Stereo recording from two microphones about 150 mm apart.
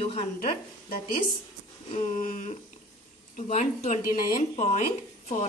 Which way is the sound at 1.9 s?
55° left (ahead or behind).